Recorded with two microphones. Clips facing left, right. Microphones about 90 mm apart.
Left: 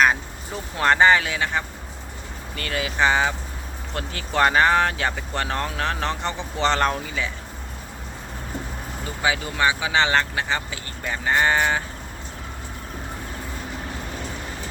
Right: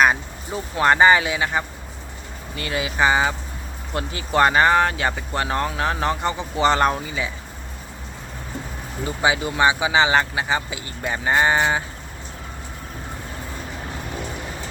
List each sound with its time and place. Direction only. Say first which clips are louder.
0.0 s speech: right 1 dB; 10° right (ahead or behind)
9.2 s speech: right 3 dB; 20° right (ahead or behind)